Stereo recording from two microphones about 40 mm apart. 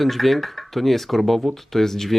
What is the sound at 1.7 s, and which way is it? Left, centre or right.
Speech, centre.